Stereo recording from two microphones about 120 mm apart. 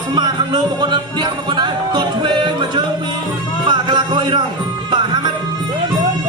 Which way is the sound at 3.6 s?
40° right (ahead or behind).